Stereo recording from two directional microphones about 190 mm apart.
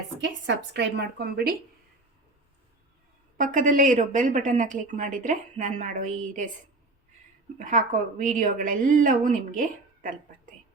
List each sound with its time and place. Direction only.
0.2 s a woman's voice: 65° right (ahead or behind)
3.3 s speech: 45° right (ahead or behind)
7.6 s a woman's voice: 40° right (ahead or behind)